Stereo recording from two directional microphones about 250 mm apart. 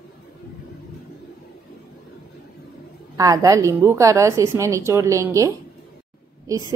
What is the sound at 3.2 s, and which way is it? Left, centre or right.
A woman's voice, centre.